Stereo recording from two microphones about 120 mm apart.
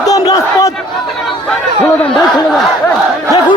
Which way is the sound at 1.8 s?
15° left (ahead or behind).